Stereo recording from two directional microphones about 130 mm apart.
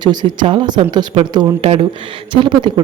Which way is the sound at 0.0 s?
35° right (ahead or behind).